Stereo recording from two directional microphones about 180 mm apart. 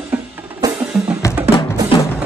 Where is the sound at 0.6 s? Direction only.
20° right (ahead or behind).